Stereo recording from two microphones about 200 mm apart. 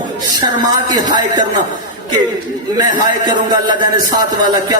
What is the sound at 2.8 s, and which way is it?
A man's voice, 20° right (ahead or behind).